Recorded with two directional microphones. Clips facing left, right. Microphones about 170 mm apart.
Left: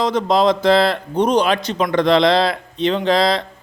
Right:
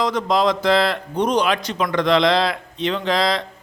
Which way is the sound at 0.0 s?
25° left (ahead or behind).